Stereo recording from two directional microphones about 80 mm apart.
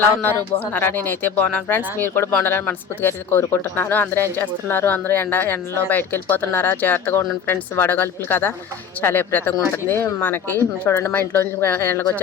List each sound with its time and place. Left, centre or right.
0.2 s speech: left